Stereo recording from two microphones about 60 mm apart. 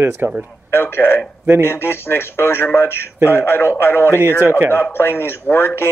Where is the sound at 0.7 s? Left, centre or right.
Left.